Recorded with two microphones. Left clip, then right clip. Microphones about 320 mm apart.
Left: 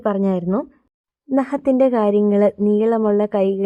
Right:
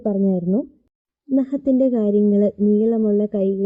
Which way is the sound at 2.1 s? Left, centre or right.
Centre.